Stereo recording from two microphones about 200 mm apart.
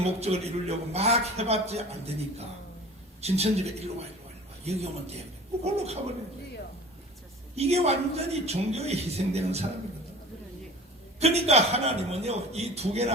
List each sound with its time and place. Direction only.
0.0 s a man's voice: 30° right (ahead or behind)
3.2 s a man's voice: 30° right (ahead or behind)
7.5 s a man's voice: 30° right (ahead or behind)
11.2 s a man's voice: 30° right (ahead or behind)